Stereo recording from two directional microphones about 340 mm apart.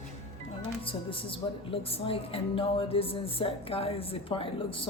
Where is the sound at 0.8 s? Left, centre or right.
Centre.